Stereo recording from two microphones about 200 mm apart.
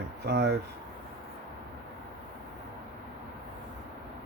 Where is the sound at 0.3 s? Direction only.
55° right (ahead or behind).